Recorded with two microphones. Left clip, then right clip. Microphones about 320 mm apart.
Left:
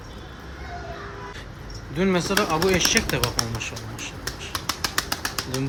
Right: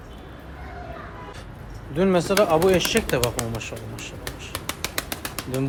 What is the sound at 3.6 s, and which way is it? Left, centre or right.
Finger snapping, centre.